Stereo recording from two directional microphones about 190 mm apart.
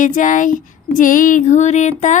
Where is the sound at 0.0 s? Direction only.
45° left (ahead or behind).